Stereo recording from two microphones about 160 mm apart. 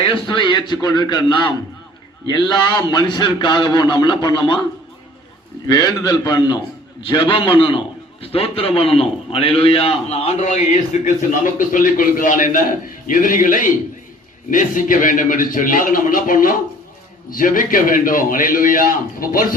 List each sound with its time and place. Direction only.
0.3 s a man's voice: 30° left (ahead or behind)
5.6 s a man's voice: 25° left (ahead or behind); by 19.5 s 60° left (ahead or behind)